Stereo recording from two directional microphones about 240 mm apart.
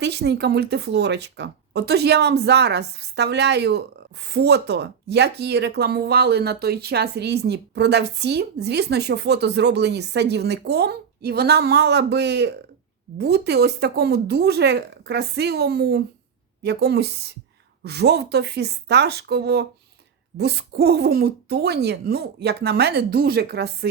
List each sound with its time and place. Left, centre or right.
0.0 s speech: right